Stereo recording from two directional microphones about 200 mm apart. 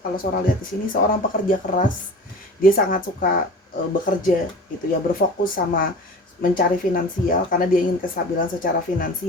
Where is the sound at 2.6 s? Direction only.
45° left (ahead or behind).